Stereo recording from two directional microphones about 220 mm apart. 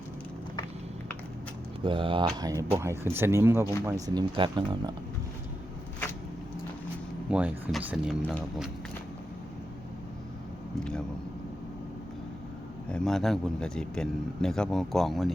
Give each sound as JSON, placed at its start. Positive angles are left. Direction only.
{"t": 1.8, "sound": "speech", "side_deg": -20}
{"t": 7.3, "sound": "speech", "side_deg": -5}
{"t": 10.8, "sound": "speech", "side_deg": 5}
{"t": 12.9, "sound": "speech", "side_deg": 5}